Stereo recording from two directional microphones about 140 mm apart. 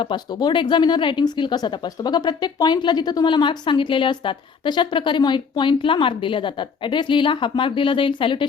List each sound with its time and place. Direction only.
0.0 s speech: 30° left (ahead or behind)